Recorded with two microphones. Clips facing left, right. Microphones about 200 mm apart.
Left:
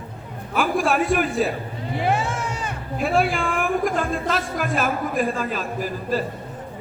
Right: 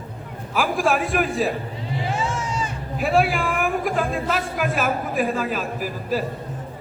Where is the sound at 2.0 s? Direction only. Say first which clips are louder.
Left 3 dB; 60° left (ahead or behind).